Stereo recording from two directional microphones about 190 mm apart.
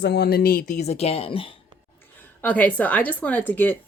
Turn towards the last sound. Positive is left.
turn(degrees=10)  # may be behind; listen again after turning